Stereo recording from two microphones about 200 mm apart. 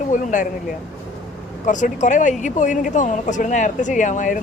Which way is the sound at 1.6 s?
40° left (ahead or behind).